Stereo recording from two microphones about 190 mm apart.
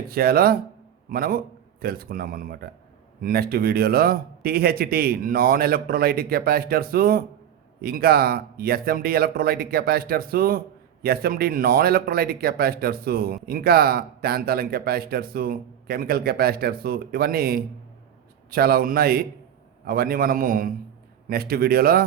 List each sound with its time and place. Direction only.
0.1 s speech: 50° right (ahead or behind)